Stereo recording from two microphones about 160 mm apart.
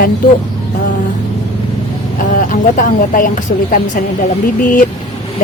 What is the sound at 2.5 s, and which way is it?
A woman's voice, 55° left (ahead or behind).